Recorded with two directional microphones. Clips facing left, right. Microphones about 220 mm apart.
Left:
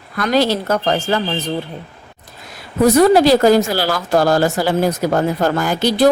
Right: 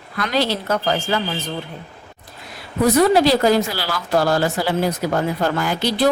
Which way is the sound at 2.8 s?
45° left (ahead or behind).